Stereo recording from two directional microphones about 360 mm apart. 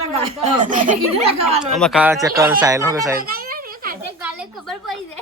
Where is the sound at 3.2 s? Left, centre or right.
Right.